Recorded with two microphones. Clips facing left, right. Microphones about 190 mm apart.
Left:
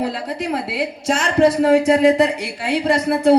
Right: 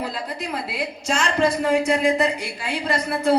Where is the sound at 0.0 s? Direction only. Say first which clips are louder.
Left 6 dB; 75° left (ahead or behind).